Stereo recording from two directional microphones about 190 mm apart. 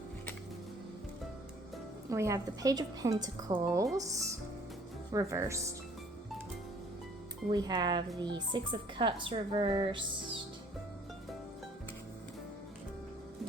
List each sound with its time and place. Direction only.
2.0 s a woman's voice: 15° right (ahead or behind)
7.5 s speech: 20° right (ahead or behind)